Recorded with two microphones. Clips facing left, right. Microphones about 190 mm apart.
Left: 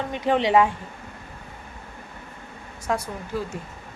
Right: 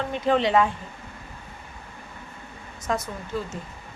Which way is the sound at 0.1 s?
15° left (ahead or behind).